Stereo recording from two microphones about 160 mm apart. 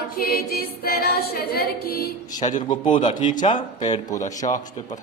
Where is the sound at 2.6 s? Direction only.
30° left (ahead or behind).